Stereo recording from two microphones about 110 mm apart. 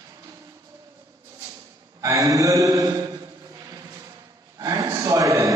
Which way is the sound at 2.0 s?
30° right (ahead or behind).